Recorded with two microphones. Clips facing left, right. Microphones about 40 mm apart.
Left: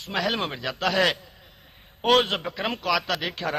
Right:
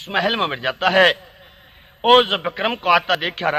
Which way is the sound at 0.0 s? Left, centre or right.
Right.